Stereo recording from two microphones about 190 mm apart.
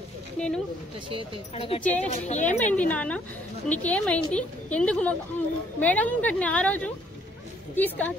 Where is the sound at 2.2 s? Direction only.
35° left (ahead or behind).